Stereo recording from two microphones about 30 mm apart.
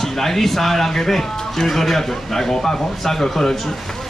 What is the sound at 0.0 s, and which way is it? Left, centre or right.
Speech, centre.